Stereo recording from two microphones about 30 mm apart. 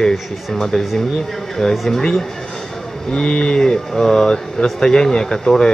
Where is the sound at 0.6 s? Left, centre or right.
Centre.